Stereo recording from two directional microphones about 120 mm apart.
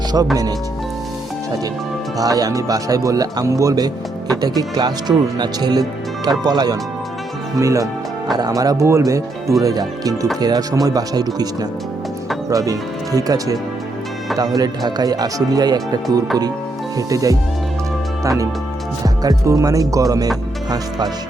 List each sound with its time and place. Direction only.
0.1 s speech: 30° right (ahead or behind)
2.1 s speech: 30° right (ahead or behind)
12.5 s speech: 30° right (ahead or behind)
17.1 s speech: 30° right (ahead or behind)